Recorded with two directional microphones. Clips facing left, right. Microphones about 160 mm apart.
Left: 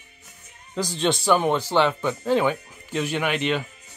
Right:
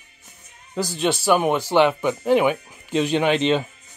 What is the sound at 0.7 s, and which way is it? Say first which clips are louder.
Speech: right 1 dB; 10° right (ahead or behind).